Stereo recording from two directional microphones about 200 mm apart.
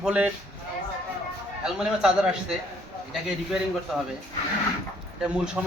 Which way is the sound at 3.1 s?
Centre (ahead or behind).